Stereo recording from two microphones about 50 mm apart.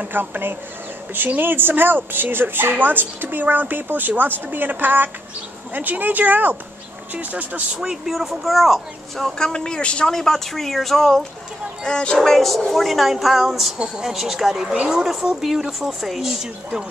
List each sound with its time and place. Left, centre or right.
0.0 s speech: right
7.7 s speech: centre
9.4 s speech: centre
10.1 s speech: centre
11.8 s speech: centre
12.2 s speech: centre